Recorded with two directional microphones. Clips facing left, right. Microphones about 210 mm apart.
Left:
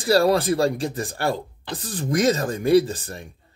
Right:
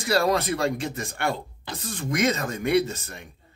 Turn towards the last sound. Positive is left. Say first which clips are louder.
# left 3 dB
turn(degrees=35)  # may be behind; listen again after turning